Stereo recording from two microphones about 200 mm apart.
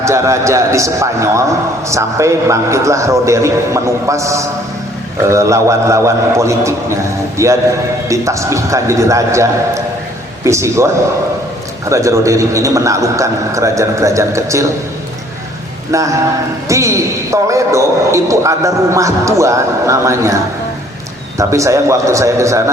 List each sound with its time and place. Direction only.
0.0 s a man's voice: 15° right (ahead or behind)
11.9 s a man's voice: 15° right (ahead or behind)
15.9 s a man's voice: 15° right (ahead or behind)